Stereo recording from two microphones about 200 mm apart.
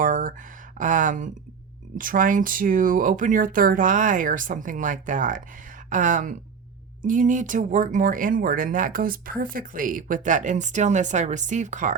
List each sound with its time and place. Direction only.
0.0 s speech: 40° right (ahead or behind)